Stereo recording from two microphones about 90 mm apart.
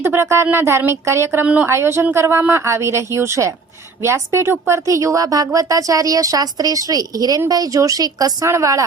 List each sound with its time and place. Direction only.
0.0 s a woman's voice: 30° right (ahead or behind); by 8.4 s 45° right (ahead or behind)
8.4 s a woman's voice: 35° right (ahead or behind)